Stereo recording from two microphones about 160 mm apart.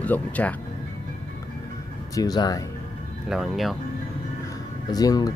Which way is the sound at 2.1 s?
25° left (ahead or behind).